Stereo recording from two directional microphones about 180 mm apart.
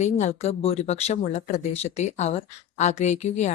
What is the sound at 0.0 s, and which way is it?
Speech, 40° left (ahead or behind).